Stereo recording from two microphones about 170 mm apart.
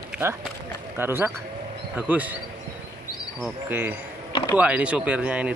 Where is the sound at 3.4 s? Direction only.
10° right (ahead or behind).